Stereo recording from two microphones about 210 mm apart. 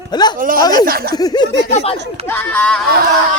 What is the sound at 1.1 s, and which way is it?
Speech, 20° left (ahead or behind).